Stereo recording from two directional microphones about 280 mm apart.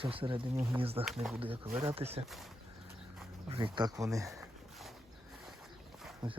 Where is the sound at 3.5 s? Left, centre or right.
Centre.